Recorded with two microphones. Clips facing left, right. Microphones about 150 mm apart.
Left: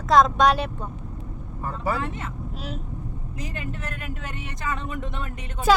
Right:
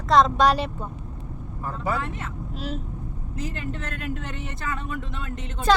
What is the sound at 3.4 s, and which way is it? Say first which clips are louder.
Speech: right 2 dB; 10° left (ahead or behind).